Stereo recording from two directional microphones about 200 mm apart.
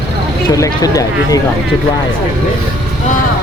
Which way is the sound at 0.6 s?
15° left (ahead or behind).